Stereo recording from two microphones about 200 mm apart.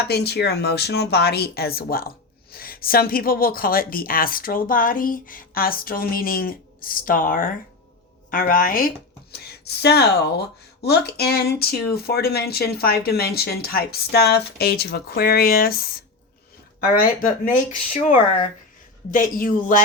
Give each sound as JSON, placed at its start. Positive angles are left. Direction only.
{"t": 0.1, "sound": "speech", "side_deg": 55}
{"t": 9.3, "sound": "speech", "side_deg": 55}
{"t": 17.0, "sound": "speech", "side_deg": 45}